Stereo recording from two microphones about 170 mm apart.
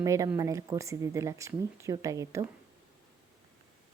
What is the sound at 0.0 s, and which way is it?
Speech, 20° right (ahead or behind).